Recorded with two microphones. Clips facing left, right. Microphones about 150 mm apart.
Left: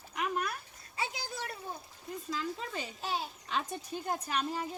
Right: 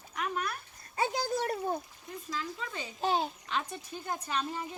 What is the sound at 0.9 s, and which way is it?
Speech, 50° right (ahead or behind).